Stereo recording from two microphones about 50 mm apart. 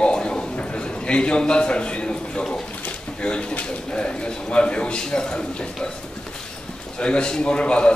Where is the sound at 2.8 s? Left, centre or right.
Left.